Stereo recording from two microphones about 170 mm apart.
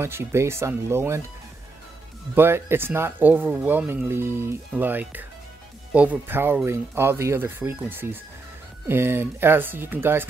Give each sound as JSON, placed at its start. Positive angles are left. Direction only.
{"t": 0.0, "sound": "speech", "side_deg": -15}
{"t": 2.3, "sound": "speech", "side_deg": -15}